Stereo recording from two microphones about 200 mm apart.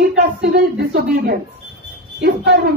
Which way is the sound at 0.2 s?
50° right (ahead or behind).